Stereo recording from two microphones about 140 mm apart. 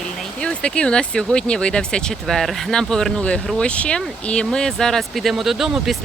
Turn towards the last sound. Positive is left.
turn(degrees=0)  # may be behind; listen again after turning